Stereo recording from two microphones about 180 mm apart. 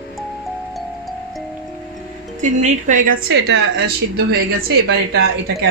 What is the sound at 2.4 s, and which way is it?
A woman's voice, 45° right (ahead or behind).